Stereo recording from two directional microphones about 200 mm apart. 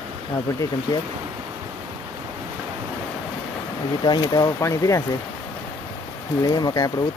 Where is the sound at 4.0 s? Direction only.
20° left (ahead or behind).